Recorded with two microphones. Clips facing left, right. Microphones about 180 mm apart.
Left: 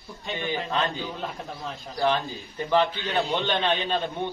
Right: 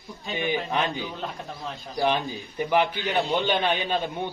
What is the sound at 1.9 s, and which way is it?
A man's voice, 15° right (ahead or behind).